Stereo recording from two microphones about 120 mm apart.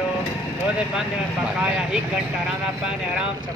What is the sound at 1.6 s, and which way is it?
Speech, 10° right (ahead or behind).